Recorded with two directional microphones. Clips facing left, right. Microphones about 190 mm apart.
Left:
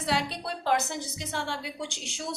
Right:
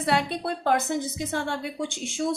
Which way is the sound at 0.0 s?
55° right (ahead or behind).